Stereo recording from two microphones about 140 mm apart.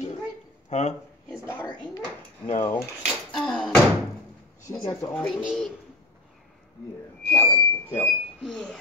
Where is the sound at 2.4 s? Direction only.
40° left (ahead or behind).